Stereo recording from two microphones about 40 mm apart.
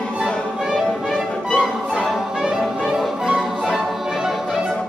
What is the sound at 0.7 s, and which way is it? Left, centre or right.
Music, centre.